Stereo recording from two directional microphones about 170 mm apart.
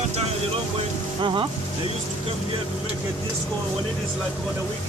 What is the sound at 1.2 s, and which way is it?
Speech, 30° right (ahead or behind).